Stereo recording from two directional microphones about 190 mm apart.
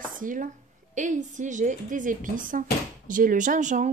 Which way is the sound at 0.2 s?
45° right (ahead or behind).